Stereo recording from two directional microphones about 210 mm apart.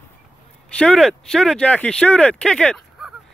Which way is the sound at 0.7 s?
5° left (ahead or behind).